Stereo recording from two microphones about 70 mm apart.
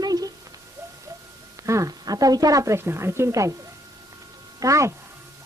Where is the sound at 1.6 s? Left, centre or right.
Right.